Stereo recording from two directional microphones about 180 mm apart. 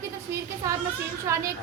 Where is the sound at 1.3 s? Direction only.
15° right (ahead or behind).